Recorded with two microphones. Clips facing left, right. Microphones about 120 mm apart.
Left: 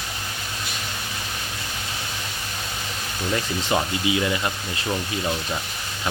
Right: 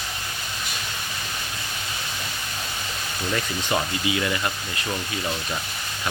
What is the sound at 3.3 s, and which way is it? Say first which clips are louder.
Speech: left 2 dB; 20° left (ahead or behind).